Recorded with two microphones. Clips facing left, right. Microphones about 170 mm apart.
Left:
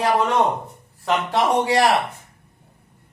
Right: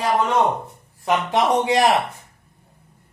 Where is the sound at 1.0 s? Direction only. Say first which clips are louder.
Right 1 dB; 20° right (ahead or behind).